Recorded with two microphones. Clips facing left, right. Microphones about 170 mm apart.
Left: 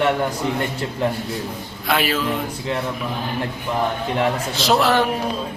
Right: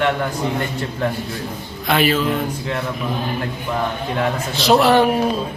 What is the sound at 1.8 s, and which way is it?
Speech, 5° left (ahead or behind).